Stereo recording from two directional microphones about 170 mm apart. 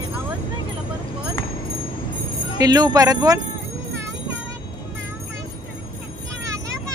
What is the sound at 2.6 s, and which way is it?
Speech, 25° right (ahead or behind).